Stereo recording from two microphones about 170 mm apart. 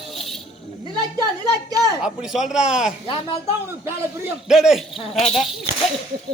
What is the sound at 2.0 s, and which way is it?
Speech, 5° right (ahead or behind).